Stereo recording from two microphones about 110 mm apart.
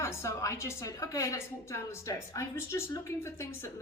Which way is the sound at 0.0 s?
25° left (ahead or behind).